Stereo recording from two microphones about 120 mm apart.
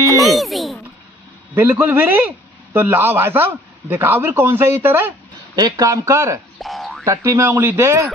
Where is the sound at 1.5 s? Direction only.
15° right (ahead or behind).